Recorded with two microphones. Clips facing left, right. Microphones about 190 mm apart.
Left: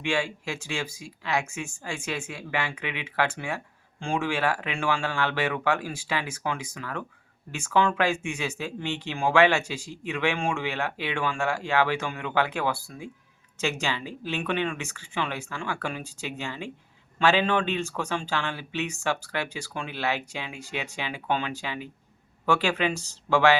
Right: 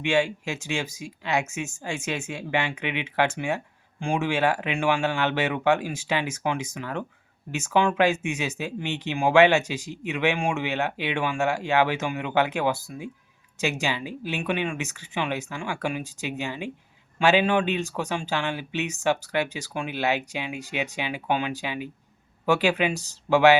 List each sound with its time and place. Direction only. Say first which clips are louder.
0.0 s speech: right 4 dB; 20° right (ahead or behind)